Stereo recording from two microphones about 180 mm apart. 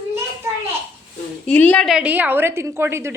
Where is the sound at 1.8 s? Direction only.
5° right (ahead or behind).